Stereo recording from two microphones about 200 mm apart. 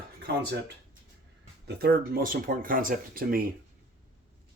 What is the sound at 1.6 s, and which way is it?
Speech, 50° right (ahead or behind).